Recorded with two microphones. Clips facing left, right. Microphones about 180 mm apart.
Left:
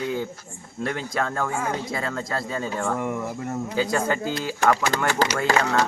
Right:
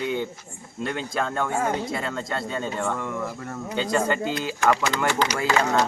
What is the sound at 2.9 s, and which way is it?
Speech, 20° left (ahead or behind).